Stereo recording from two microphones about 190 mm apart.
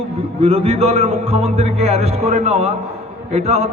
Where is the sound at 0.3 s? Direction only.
30° right (ahead or behind).